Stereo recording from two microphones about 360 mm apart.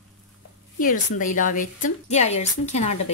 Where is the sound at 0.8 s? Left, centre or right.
Left.